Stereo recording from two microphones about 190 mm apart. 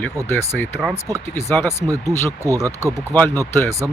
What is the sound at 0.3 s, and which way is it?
Speech, 10° left (ahead or behind).